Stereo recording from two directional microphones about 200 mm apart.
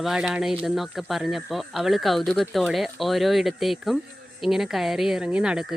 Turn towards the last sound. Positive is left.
turn(degrees=-5)  # may be behind; listen again after turning